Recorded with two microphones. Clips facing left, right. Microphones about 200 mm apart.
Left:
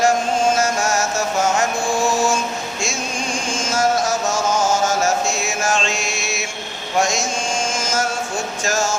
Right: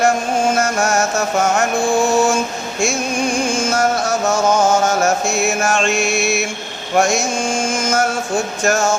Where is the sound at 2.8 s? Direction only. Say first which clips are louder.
Right 11 dB; 60° right (ahead or behind).